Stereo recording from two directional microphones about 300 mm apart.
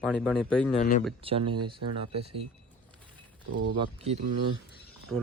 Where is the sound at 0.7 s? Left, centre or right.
Left.